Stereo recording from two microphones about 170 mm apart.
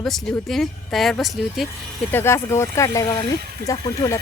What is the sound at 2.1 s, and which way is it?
Speech, 15° left (ahead or behind).